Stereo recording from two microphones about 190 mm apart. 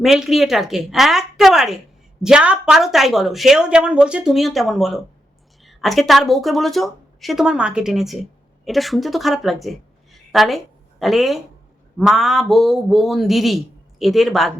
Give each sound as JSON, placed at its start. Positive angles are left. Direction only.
{"t": 0.0, "sound": "a woman's voice", "side_deg": 0}